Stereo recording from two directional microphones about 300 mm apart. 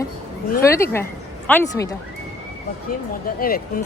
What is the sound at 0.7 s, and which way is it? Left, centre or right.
A woman's voice, centre.